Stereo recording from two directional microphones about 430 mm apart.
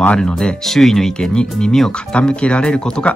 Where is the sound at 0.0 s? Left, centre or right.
Centre.